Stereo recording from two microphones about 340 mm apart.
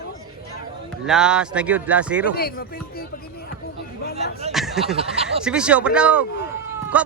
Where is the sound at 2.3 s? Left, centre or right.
Left.